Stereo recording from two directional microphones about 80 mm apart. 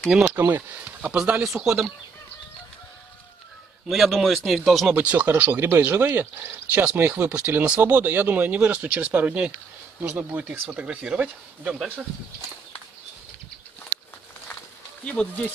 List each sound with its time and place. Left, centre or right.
0.1 s speech: centre
0.5 s speech: right
1.1 s speech: centre
3.8 s a man's voice: centre
4.9 s speech: right
15.0 s speech: centre